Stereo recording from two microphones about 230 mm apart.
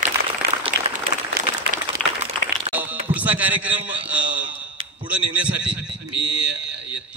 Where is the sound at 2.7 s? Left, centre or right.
Right.